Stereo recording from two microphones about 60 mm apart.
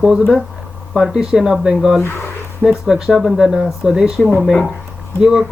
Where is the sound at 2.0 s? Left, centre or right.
Left.